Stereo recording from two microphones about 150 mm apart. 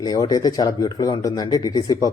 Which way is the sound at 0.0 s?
25° left (ahead or behind).